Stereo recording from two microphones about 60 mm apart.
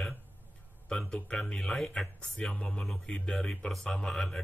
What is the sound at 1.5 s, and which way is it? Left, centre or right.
Speech, centre.